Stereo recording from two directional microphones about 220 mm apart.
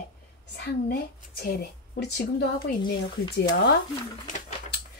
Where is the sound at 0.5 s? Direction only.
45° left (ahead or behind).